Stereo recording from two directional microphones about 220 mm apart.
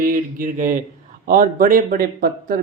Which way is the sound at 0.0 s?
40° right (ahead or behind).